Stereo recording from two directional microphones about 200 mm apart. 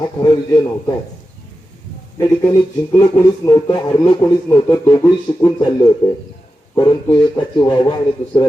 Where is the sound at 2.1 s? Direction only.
20° left (ahead or behind).